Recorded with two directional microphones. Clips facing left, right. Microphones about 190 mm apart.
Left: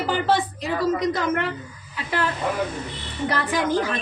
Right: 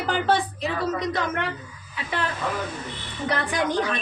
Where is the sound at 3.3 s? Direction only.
Centre (ahead or behind).